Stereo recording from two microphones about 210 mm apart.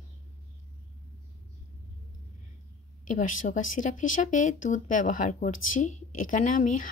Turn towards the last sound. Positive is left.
turn(degrees=40)  # may be behind; listen again after turning